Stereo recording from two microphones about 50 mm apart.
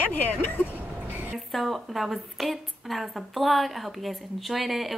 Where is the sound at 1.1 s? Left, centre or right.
Right.